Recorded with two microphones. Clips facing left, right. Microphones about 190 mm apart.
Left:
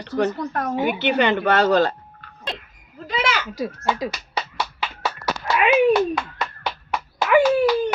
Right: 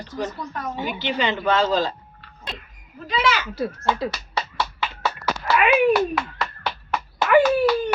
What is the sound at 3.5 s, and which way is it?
Speech, 10° left (ahead or behind).